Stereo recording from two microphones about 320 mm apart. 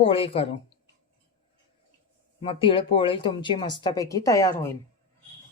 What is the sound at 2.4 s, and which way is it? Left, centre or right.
Speech, centre.